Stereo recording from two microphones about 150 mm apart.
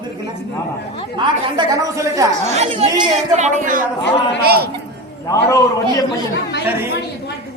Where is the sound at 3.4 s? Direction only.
55° right (ahead or behind).